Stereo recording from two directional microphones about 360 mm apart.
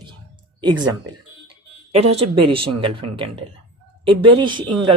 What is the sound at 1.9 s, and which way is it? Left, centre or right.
Speech, centre.